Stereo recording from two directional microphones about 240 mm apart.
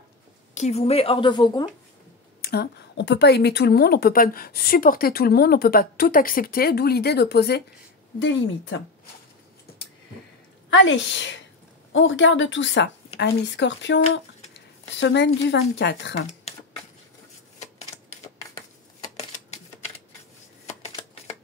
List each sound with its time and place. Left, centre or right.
0.6 s a woman's voice: left
2.4 s a woman's voice: left
10.7 s a woman's voice: left
16.5 s typing: left
20.6 s shuffling cards: left